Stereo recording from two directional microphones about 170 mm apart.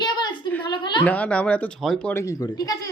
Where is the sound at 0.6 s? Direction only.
30° left (ahead or behind).